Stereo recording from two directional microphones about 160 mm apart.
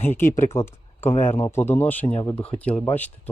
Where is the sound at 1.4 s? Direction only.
15° left (ahead or behind).